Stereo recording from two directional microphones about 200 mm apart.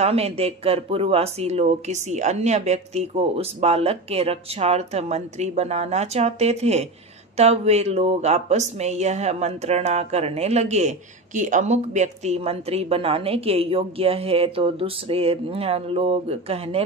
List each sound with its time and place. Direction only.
0.0 s speech: 30° right (ahead or behind)